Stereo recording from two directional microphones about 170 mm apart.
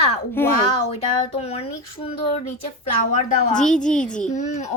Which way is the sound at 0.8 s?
40° left (ahead or behind).